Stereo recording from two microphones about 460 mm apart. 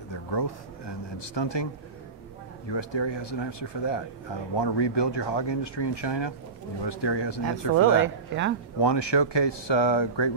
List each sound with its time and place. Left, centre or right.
0.1 s a sound: left
2.7 s speech: left
8.0 s speech: right
8.8 s speech: left